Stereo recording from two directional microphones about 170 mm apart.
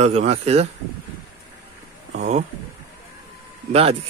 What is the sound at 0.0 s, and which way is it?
Speech, 40° right (ahead or behind).